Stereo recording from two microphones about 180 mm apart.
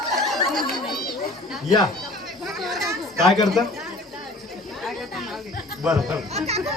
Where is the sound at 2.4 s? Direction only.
Centre (ahead or behind).